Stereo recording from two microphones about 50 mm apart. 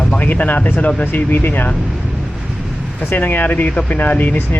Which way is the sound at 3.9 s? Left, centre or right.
Left.